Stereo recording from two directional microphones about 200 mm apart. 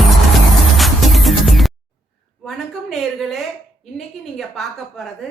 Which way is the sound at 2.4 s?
Centre (ahead or behind).